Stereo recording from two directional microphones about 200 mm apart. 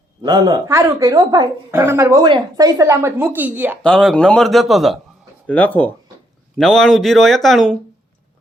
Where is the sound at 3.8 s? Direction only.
5° left (ahead or behind).